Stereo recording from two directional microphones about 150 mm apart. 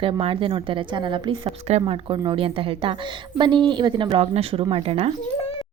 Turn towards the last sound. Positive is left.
turn(degrees=-40)  # may be behind; listen again after turning